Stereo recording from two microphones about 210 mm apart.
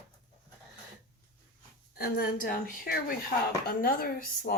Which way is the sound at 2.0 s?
45° left (ahead or behind).